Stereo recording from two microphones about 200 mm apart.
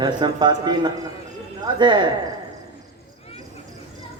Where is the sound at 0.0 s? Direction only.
20° right (ahead or behind).